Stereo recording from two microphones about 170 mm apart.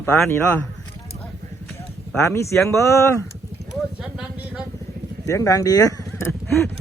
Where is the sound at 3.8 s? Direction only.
5° right (ahead or behind).